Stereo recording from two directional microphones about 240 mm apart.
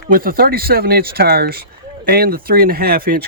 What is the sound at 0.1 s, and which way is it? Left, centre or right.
Speech, right.